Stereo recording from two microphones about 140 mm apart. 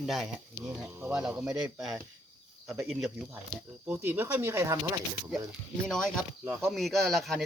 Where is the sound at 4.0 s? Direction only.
15° right (ahead or behind).